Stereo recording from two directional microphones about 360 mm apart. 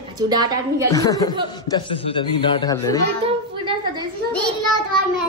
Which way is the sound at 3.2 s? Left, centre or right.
Centre.